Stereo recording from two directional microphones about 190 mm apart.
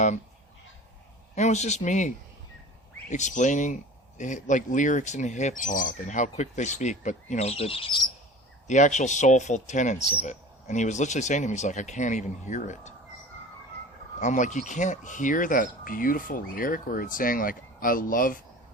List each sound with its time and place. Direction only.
1.4 s speech: 35° left (ahead or behind)
8.6 s speech: 40° left (ahead or behind)
14.2 s speech: 40° left (ahead or behind)